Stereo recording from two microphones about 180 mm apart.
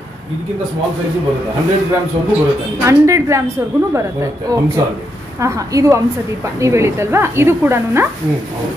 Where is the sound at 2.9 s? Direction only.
15° right (ahead or behind).